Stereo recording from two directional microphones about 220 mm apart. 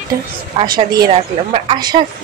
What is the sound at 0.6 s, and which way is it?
A woman's voice, 20° right (ahead or behind).